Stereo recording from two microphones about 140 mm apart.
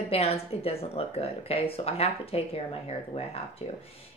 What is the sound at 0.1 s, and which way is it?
A woman's voice, 45° left (ahead or behind).